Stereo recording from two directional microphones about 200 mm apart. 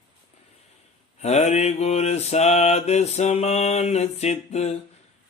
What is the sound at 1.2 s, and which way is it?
Mantra, 35° left (ahead or behind).